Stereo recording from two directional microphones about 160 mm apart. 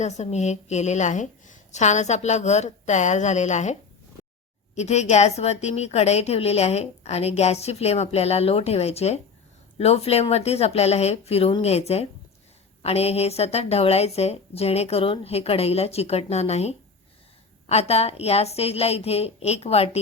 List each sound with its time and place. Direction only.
0.0 s a woman's voice: 45° left (ahead or behind)